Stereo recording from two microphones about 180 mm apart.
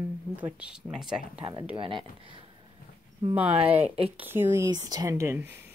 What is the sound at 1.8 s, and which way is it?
Speech, 30° right (ahead or behind).